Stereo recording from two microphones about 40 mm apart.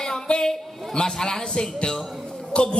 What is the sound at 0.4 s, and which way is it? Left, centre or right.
Speech, centre.